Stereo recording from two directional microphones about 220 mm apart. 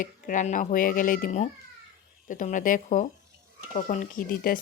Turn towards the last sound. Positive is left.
turn(degrees=40)  # may be behind; listen again after turning